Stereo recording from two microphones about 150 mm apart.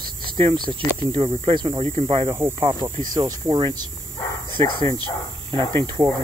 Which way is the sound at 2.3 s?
15° right (ahead or behind).